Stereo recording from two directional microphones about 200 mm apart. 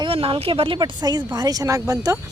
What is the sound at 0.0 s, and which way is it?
Speech, 25° right (ahead or behind).